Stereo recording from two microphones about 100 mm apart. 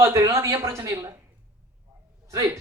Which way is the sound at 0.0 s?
30° right (ahead or behind).